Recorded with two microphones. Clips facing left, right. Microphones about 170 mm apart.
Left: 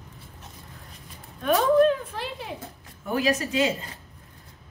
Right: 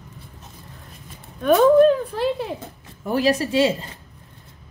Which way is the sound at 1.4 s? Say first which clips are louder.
Right 6 dB; 50° right (ahead or behind).